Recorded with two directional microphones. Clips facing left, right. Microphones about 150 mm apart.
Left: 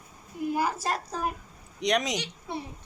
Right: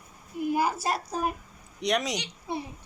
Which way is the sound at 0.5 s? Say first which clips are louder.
Right 1 dB; 10° right (ahead or behind).